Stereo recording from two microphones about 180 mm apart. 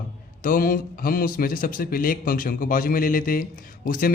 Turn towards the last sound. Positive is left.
turn(degrees=50)  # may be behind; listen again after turning